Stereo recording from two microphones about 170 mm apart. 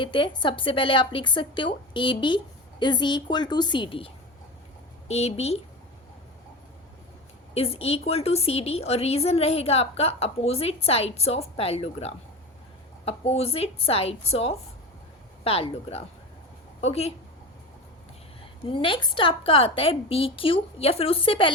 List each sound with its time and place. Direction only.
0.0 s a woman's voice: 30° left (ahead or behind)
7.5 s a woman's voice: 35° left (ahead or behind)
18.6 s a woman's voice: 30° left (ahead or behind)